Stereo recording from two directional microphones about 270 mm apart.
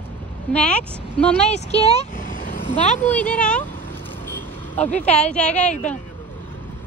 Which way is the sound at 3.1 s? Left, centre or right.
Centre.